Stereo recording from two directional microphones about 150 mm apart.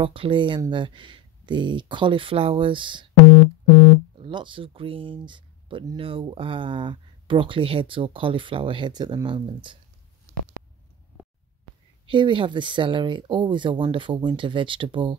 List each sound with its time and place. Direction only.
0.0 s speech: 35° right (ahead or behind)
3.2 s busy signal: 40° left (ahead or behind)
4.2 s speech: 35° right (ahead or behind)
12.1 s speech: 35° right (ahead or behind)